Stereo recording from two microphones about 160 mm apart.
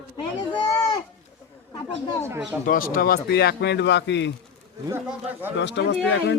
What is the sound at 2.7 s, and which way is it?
Speech, 60° left (ahead or behind).